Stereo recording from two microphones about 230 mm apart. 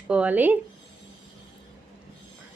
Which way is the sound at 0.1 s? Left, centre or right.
Centre.